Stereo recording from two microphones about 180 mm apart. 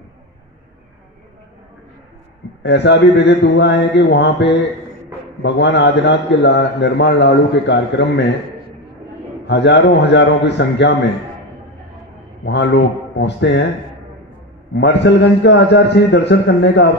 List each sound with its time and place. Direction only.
2.6 s a man's voice: 75° left (ahead or behind)
9.5 s a man's voice: 70° left (ahead or behind)
12.4 s a man's voice: 75° left (ahead or behind)
14.7 s a man's voice: 70° left (ahead or behind)